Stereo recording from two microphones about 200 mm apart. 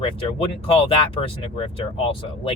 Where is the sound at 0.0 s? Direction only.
30° left (ahead or behind).